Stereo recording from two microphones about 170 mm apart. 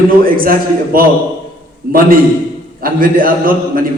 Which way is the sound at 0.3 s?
55° right (ahead or behind).